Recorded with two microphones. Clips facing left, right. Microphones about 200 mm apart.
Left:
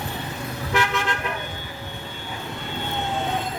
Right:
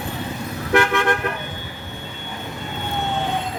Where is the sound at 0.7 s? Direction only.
55° right (ahead or behind).